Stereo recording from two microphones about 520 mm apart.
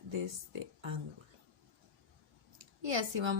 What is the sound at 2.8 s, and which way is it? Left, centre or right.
Speech, right.